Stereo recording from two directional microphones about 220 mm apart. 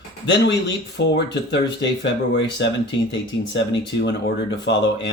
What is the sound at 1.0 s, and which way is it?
Speech, 50° left (ahead or behind).